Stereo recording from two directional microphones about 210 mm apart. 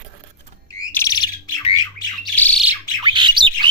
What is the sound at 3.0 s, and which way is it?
Bird, 20° right (ahead or behind).